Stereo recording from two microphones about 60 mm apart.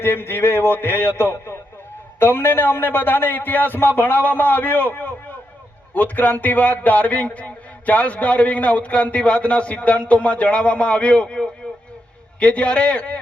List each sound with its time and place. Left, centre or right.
0.0 s a man's voice: left; by 13.1 s centre